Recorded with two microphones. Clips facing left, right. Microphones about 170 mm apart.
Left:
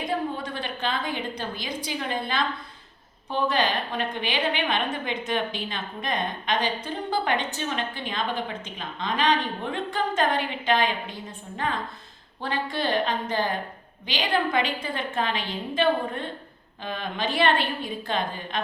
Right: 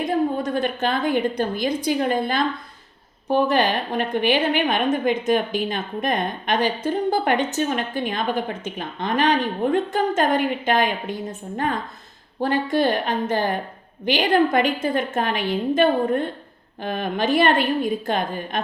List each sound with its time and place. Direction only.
0.4 s a woman's voice: 45° right (ahead or behind)
3.5 s a woman's voice: 50° right (ahead or behind)